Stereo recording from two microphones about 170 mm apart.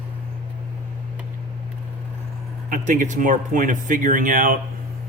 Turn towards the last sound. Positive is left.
turn(degrees=-55)  # may be behind; listen again after turning